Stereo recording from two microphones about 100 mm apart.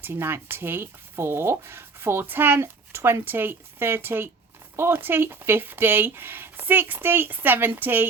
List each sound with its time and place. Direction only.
0.0 s speech: 20° right (ahead or behind)